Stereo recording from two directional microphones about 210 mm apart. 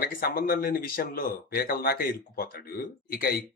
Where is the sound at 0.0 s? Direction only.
45° left (ahead or behind).